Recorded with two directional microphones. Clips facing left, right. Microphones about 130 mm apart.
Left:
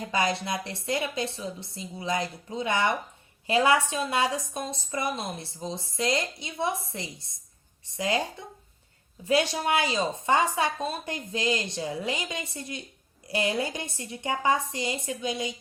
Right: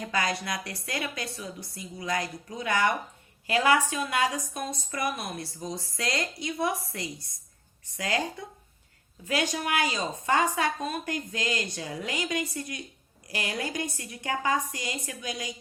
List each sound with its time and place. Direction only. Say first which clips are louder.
0.1 s a woman's voice: left 3 dB; 20° left (ahead or behind)
9.2 s a woman's voice: left 4 dB; 25° left (ahead or behind)